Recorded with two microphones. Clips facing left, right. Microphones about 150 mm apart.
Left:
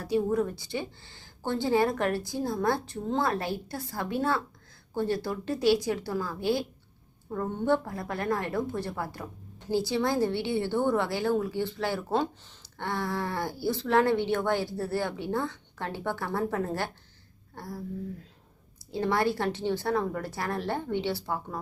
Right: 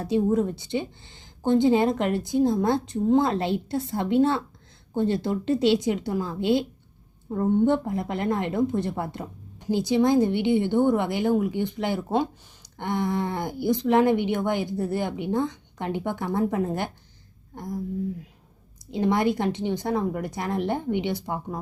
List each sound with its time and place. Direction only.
0.0 s a woman's voice: 20° right (ahead or behind)
17.5 s a sound: 15° right (ahead or behind)
18.9 s speech: 20° right (ahead or behind)